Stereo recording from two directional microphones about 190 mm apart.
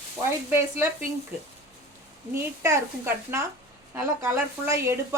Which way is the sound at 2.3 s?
15° right (ahead or behind).